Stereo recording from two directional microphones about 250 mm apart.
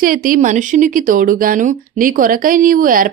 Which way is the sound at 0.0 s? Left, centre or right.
Right.